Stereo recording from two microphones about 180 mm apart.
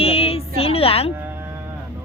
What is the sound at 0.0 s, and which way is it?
Music, 30° left (ahead or behind).